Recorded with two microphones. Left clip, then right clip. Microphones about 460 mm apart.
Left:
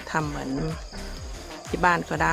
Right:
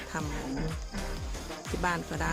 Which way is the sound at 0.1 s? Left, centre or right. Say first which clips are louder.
Left 10 dB; left.